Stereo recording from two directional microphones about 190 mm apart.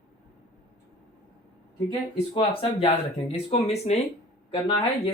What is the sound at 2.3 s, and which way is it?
Speech, 30° left (ahead or behind).